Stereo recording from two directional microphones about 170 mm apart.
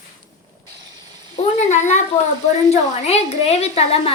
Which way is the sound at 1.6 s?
45° left (ahead or behind).